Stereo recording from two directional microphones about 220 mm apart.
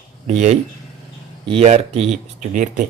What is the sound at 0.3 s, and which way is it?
Speech, 30° right (ahead or behind).